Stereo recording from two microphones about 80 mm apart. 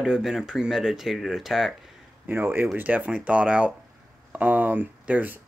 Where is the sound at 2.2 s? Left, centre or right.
Right.